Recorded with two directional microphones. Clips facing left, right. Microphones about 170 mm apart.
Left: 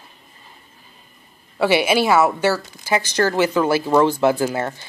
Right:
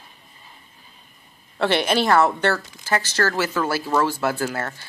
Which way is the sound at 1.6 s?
5° left (ahead or behind).